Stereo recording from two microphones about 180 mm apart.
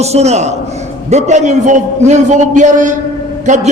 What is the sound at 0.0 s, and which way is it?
A man's voice, 35° right (ahead or behind).